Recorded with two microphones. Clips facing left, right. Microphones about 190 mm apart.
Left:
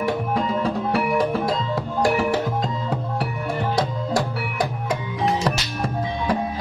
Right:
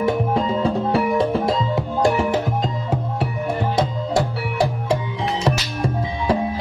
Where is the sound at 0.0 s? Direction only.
25° right (ahead or behind).